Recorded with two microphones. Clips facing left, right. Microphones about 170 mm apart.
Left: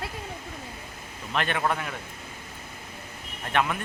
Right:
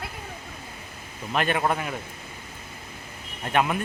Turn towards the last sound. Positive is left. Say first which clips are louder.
# right 3 dB
turn(degrees=-20)  # may be behind; listen again after turning